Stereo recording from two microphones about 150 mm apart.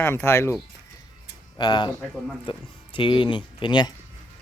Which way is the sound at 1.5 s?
30° left (ahead or behind).